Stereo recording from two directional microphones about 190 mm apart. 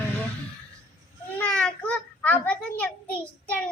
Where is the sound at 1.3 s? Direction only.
5° left (ahead or behind).